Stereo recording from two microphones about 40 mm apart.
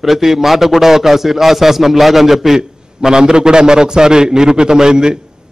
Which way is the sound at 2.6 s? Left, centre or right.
Centre.